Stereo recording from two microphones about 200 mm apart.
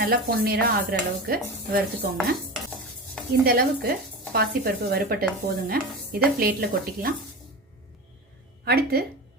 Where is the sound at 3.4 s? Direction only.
50° right (ahead or behind).